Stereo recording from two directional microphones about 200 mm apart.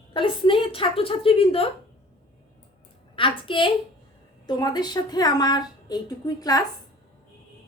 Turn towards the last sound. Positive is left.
turn(degrees=20)  # may be behind; listen again after turning